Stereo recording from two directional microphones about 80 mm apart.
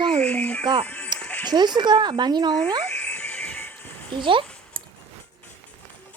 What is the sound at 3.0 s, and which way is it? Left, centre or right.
Music, centre.